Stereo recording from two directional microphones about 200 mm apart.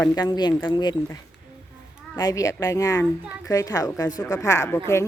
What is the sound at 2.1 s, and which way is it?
Speech, 15° left (ahead or behind).